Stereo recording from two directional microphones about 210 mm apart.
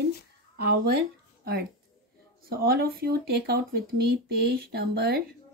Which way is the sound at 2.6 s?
45° right (ahead or behind).